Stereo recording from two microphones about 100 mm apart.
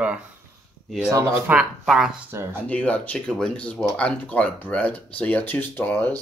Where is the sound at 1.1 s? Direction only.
30° right (ahead or behind).